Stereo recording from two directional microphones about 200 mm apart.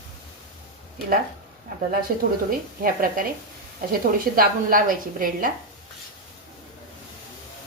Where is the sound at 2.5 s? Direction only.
45° right (ahead or behind).